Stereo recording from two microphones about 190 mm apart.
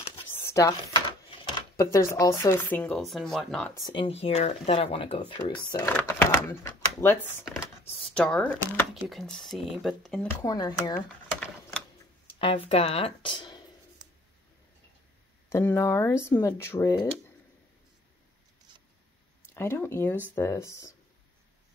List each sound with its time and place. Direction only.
0.3 s a sound: 15° left (ahead or behind)
1.4 s speech: 15° left (ahead or behind)
3.7 s speech: 25° left (ahead or behind); by 10.2 s centre (ahead or behind)
10.4 s speech: 20° left (ahead or behind)
11.3 s typewriter: 5° left (ahead or behind)
12.4 s speech: 30° left (ahead or behind)
15.5 s speech: 15° left (ahead or behind)
19.5 s speech: 15° left (ahead or behind)